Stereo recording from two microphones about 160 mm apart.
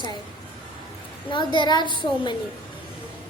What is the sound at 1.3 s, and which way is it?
A child's voice, 30° left (ahead or behind).